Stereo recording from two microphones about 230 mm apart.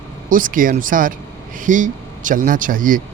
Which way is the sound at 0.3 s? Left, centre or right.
Right.